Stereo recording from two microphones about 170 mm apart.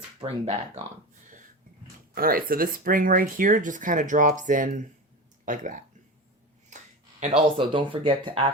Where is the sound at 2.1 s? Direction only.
60° right (ahead or behind).